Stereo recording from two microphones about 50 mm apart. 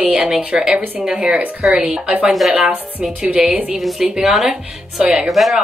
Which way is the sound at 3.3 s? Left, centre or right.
Right.